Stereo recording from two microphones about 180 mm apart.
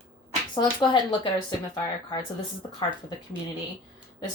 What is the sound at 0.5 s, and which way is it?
Speech, 25° left (ahead or behind).